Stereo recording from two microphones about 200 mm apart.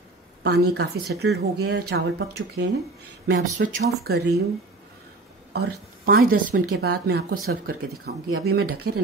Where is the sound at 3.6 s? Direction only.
55° right (ahead or behind).